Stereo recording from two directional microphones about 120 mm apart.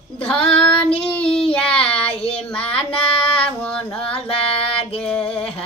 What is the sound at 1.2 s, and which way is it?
Child singing, 50° left (ahead or behind).